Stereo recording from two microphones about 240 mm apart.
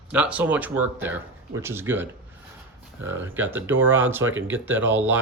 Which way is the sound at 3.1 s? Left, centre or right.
Centre.